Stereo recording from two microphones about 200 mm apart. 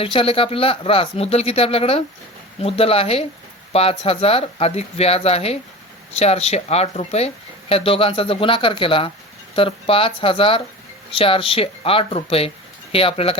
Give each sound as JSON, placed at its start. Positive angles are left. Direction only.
{"t": 0.0, "sound": "speech", "side_deg": 25}